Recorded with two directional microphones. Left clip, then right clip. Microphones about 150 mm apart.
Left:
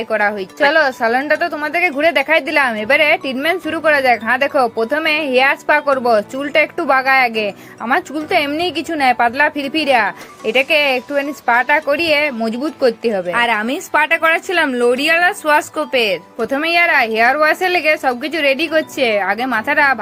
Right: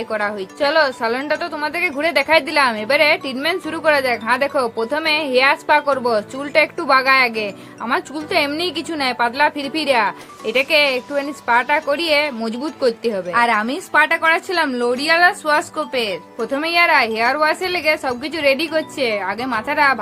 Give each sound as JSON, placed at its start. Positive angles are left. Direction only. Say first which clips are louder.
{"t": 0.1, "sound": "a woman's voice", "louder": "left 7 dB", "side_deg": 15}